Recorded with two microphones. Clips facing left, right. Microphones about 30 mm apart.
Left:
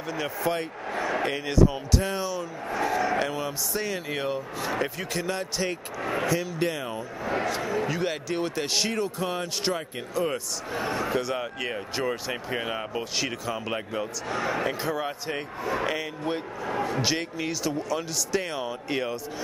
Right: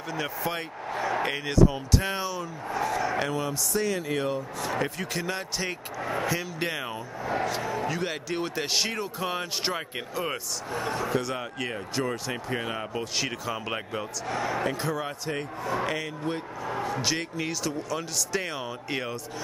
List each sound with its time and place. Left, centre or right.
0.1 s speech: centre
2.8 s a sound: centre
3.2 s a man's voice: centre
7.4 s speech: centre
10.7 s speech: centre
11.1 s speech: centre